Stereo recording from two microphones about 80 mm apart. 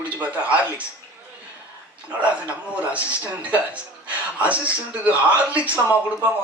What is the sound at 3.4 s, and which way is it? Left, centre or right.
A man's voice, centre.